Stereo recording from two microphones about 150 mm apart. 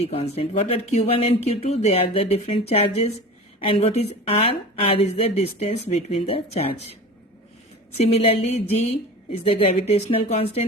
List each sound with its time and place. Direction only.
0.1 s a woman's voice: 40° left (ahead or behind)
7.9 s a woman's voice: 45° left (ahead or behind)